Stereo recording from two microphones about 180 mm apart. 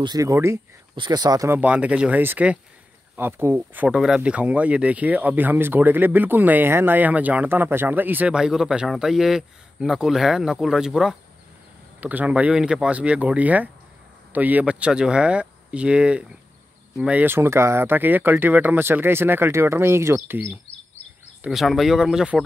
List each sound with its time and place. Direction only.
0.0 s speech: 20° right (ahead or behind)
1.6 s speech: 5° right (ahead or behind)